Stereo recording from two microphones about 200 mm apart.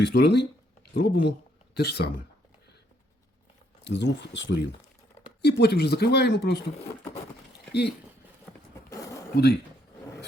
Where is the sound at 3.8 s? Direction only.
60° left (ahead or behind).